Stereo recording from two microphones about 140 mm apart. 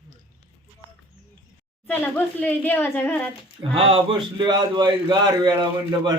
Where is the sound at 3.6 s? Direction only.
40° right (ahead or behind).